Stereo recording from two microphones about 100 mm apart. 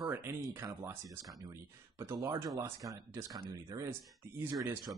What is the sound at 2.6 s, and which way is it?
Speech, 30° right (ahead or behind).